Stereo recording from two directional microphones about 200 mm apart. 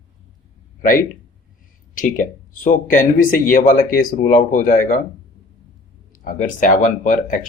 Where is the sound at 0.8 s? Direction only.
45° left (ahead or behind).